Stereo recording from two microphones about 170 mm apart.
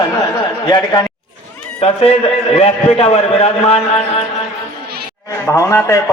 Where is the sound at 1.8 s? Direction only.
35° left (ahead or behind).